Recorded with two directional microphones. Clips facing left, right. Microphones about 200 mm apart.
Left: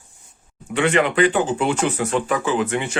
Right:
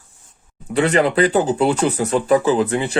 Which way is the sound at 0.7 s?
35° right (ahead or behind).